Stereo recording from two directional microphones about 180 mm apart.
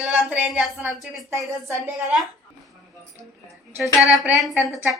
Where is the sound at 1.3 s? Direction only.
15° right (ahead or behind).